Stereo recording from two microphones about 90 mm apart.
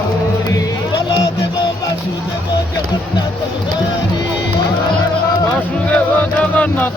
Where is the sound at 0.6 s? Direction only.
45° left (ahead or behind).